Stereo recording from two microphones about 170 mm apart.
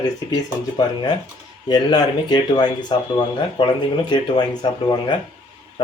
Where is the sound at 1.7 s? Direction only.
25° left (ahead or behind).